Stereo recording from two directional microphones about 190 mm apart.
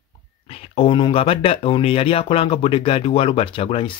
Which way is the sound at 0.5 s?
30° left (ahead or behind).